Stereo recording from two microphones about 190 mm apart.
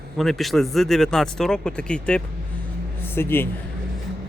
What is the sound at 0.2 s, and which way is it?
A man's voice, centre (ahead or behind).